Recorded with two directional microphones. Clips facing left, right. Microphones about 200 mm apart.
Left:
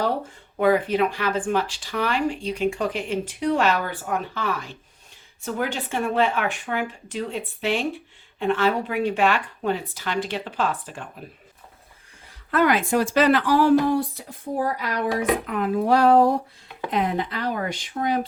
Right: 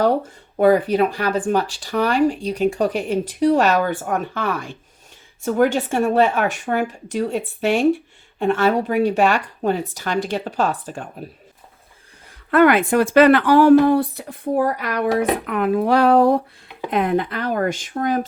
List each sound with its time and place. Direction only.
0.5 s speech: 40° right (ahead or behind)
12.5 s speech: 60° right (ahead or behind)
16.9 s speech: 55° right (ahead or behind)